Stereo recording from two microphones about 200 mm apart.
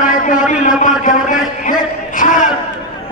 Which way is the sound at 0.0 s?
40° left (ahead or behind).